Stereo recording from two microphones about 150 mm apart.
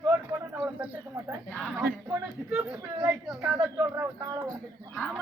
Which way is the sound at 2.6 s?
10° right (ahead or behind).